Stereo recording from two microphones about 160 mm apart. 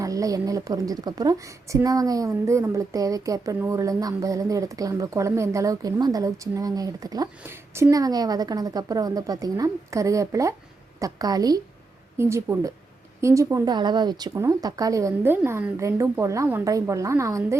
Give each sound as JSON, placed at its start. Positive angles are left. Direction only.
{"t": 0.0, "sound": "a woman's voice", "side_deg": -20}